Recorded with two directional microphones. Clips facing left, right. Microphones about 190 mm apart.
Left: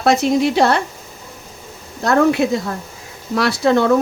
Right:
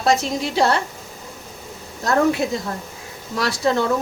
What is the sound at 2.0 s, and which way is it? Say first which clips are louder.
A woman's voice: left 4 dB; 65° left (ahead or behind).